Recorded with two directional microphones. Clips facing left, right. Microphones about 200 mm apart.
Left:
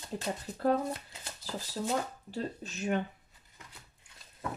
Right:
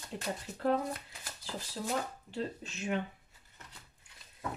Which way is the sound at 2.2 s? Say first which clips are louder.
Left 1 dB; 40° left (ahead or behind).